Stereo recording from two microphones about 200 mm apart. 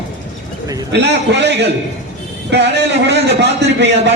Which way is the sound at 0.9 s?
60° right (ahead or behind).